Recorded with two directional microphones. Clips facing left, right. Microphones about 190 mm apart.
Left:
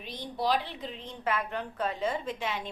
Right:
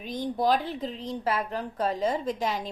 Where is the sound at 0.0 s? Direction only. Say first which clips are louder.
Right 6 dB; 45° right (ahead or behind).